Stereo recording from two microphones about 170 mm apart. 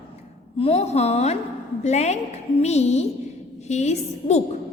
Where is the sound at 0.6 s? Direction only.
35° left (ahead or behind).